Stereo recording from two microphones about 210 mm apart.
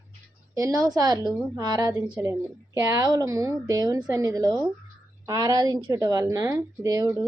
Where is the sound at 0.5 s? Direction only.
15° right (ahead or behind).